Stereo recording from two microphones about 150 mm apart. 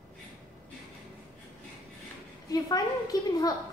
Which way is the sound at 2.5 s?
25° left (ahead or behind).